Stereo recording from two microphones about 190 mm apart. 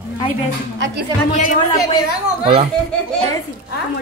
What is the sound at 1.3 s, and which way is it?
Speech, 40° left (ahead or behind).